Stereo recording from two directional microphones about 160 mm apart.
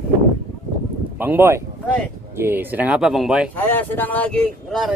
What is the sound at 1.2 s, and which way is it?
Speech, 15° right (ahead or behind).